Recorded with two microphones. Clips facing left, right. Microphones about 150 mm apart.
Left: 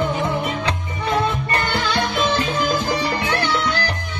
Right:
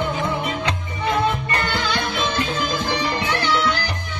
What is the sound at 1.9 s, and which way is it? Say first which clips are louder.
Music: left 3 dB; 35° left (ahead or behind).